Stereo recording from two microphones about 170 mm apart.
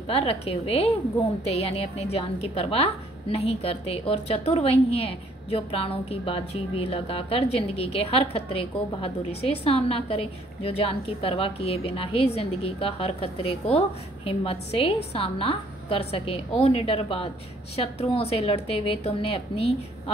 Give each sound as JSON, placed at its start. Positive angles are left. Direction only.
{"t": 0.1, "sound": "a woman's voice", "side_deg": 35}